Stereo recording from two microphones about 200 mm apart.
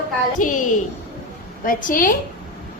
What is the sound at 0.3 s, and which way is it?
Speech, 40° left (ahead or behind).